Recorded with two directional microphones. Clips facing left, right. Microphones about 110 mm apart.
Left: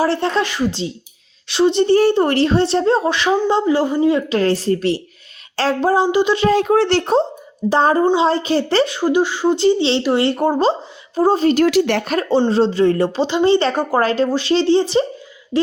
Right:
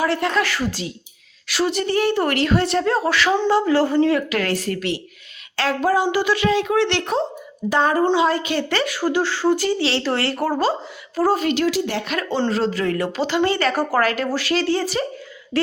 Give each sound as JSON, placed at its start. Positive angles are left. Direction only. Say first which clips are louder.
{"t": 0.0, "sound": "a woman's voice", "louder": "left 3 dB", "side_deg": 30}
{"t": 4.3, "sound": "a woman's voice", "louder": "left 6 dB", "side_deg": 30}
{"t": 6.5, "sound": "a woman's voice", "louder": "left 5 dB", "side_deg": 45}
{"t": 11.6, "sound": "speech", "louder": "left 6 dB", "side_deg": 70}
{"t": 12.0, "sound": "speech", "louder": "left 7 dB", "side_deg": 40}
{"t": 12.5, "sound": "a woman's voice", "louder": "left 6 dB", "side_deg": 30}